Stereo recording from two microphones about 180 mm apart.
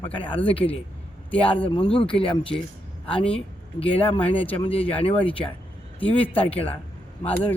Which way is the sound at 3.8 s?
30° left (ahead or behind).